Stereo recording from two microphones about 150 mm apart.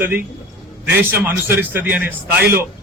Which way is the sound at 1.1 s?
15° right (ahead or behind).